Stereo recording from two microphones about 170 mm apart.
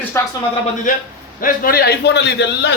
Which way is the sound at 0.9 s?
50° left (ahead or behind).